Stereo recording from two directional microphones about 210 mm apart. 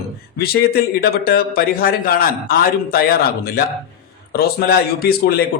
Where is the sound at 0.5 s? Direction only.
45° left (ahead or behind).